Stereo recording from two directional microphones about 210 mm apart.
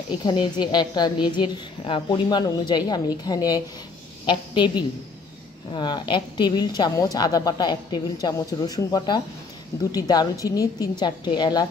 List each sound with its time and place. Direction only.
0.2 s a woman's voice: 20° left (ahead or behind)